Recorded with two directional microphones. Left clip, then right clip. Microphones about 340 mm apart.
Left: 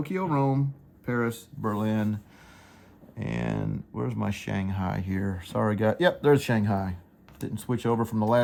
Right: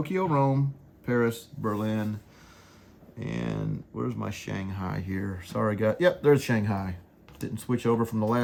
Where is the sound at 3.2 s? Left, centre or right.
Left.